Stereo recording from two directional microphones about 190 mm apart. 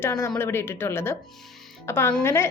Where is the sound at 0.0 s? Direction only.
15° left (ahead or behind).